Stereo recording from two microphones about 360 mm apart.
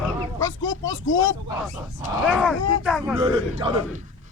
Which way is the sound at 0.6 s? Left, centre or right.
Left.